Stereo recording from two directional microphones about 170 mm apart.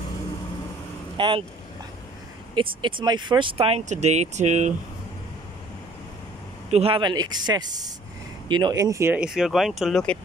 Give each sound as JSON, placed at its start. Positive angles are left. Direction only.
{"t": 1.1, "sound": "speech", "side_deg": -30}
{"t": 2.5, "sound": "speech", "side_deg": -30}
{"t": 6.7, "sound": "speech", "side_deg": -35}